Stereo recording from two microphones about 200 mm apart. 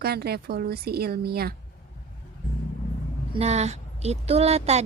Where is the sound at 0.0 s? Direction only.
50° right (ahead or behind).